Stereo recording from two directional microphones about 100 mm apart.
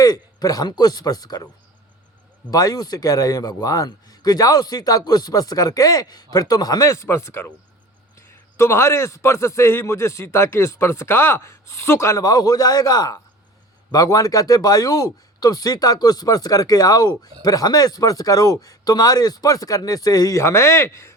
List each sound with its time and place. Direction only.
0.0 s a man's voice: 40° left (ahead or behind)
2.5 s a man's voice: 40° left (ahead or behind)